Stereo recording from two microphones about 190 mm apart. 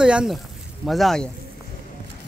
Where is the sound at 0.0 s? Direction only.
5° right (ahead or behind).